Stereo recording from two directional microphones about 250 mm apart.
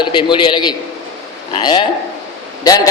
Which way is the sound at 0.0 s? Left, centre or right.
Centre.